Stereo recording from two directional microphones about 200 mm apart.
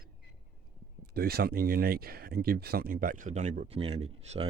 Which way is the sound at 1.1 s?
50° right (ahead or behind).